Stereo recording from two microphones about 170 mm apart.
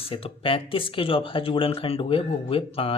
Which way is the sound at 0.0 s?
35° left (ahead or behind).